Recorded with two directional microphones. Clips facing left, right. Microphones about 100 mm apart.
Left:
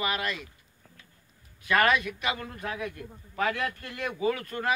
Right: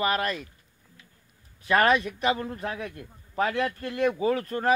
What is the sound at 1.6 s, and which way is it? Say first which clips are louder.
A man's voice: right 3 dB; 30° right (ahead or behind).